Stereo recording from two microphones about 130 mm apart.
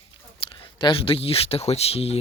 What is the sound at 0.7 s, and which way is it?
Speech, 40° left (ahead or behind).